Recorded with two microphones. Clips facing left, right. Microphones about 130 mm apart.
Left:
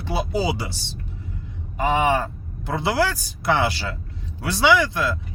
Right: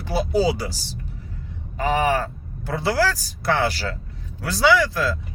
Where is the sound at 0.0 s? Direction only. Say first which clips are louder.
Right 3 dB; 20° left (ahead or behind).